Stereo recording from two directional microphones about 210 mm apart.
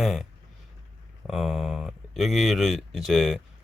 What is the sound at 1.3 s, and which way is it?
Speech, centre (ahead or behind).